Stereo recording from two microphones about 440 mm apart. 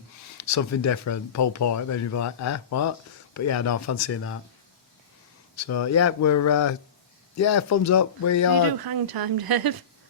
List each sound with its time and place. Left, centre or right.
0.3 s speech: left
5.5 s speech: left
8.8 s speech: right